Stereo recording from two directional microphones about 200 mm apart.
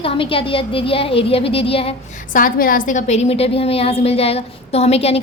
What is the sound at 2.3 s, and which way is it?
A woman's voice, 45° left (ahead or behind).